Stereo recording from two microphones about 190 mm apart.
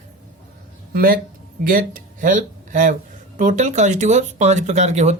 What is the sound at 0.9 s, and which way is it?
A woman's voice, 50° right (ahead or behind).